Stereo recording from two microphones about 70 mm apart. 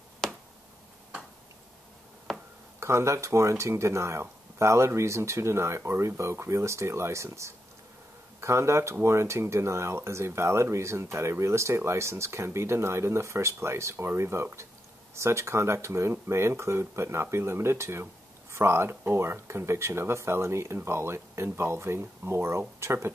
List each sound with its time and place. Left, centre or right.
0.2 s finger snapping: centre
2.3 s a sound: centre
2.8 s speech: right